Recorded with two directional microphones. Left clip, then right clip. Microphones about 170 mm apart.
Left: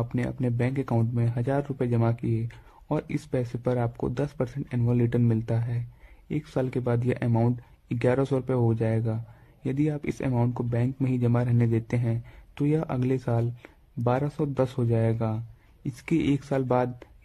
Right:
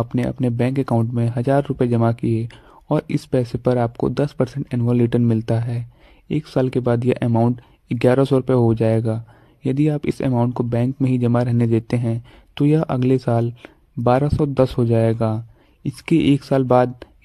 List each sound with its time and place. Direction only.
0.0 s a man's voice: 30° right (ahead or behind)